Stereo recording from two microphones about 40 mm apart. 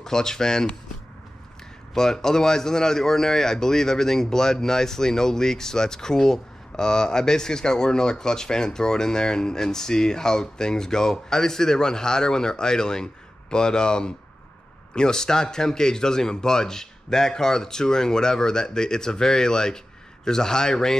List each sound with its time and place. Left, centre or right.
0.0 s a man's voice: centre
2.0 s a man's voice: centre